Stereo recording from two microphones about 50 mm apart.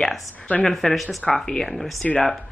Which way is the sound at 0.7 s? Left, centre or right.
Centre.